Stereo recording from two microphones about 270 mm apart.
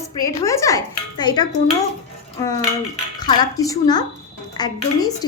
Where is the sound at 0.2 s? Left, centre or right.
Centre.